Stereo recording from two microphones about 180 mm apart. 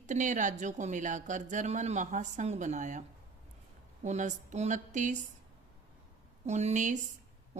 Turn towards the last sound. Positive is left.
turn(degrees=-40)  # may be behind; listen again after turning